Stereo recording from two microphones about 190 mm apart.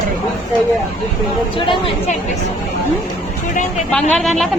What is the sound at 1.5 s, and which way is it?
Speech, 25° left (ahead or behind).